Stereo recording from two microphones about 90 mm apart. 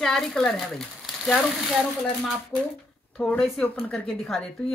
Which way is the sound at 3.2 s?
15° left (ahead or behind).